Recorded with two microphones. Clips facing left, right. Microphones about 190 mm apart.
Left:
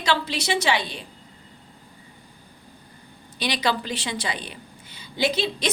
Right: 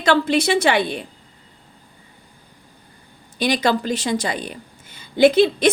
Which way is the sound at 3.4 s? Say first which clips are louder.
Right 6 dB; 45° right (ahead or behind).